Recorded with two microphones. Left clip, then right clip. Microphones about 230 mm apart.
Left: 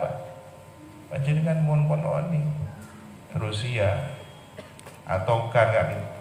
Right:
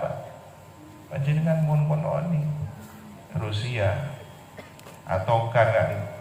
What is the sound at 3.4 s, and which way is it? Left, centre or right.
Speech, left.